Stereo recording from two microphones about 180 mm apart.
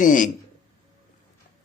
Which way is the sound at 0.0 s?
45° left (ahead or behind).